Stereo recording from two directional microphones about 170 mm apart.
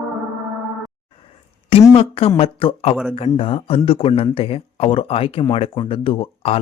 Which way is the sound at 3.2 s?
35° left (ahead or behind).